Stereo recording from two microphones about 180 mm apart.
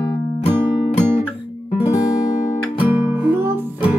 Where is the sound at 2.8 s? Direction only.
10° right (ahead or behind).